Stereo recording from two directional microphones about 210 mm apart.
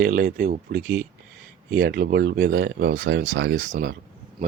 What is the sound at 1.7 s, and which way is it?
Speech, 55° right (ahead or behind).